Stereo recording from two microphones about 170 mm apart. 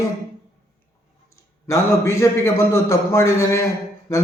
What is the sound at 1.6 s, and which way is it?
A man's voice, 15° left (ahead or behind).